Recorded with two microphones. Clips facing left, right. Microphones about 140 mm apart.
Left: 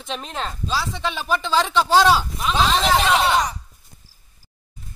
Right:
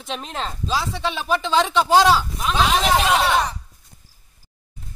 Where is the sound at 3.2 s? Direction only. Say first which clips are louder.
Even; 15° left (ahead or behind).